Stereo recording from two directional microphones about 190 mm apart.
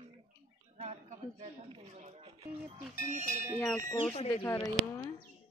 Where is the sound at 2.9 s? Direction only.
45° left (ahead or behind).